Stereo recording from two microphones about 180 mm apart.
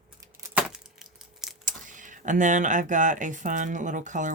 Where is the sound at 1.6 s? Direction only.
45° right (ahead or behind).